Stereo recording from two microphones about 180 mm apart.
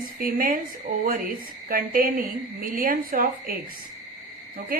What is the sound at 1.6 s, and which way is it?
Speech, 50° right (ahead or behind).